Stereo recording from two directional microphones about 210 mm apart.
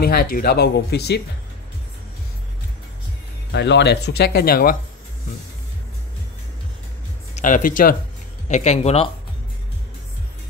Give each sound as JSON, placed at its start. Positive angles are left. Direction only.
{"t": 0.0, "sound": "speech", "side_deg": 45}
{"t": 3.5, "sound": "speech", "side_deg": 55}
{"t": 7.3, "sound": "speech", "side_deg": 40}